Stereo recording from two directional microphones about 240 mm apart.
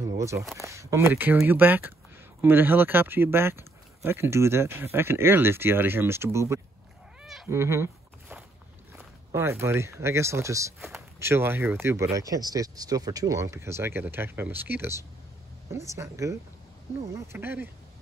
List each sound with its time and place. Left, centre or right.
0.2 s speech: centre
7.2 s cat: centre
7.5 s a sound: centre
9.3 s speech: centre